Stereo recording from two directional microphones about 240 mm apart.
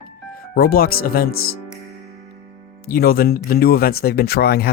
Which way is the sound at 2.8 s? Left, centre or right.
Left.